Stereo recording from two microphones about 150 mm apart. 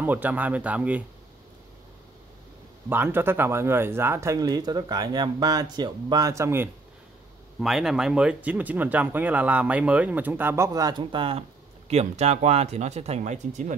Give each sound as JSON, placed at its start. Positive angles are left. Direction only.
{"t": 0.0, "sound": "speech", "side_deg": -10}
{"t": 2.9, "sound": "speech", "side_deg": -15}
{"t": 7.6, "sound": "speech", "side_deg": -5}
{"t": 11.9, "sound": "speech", "side_deg": -45}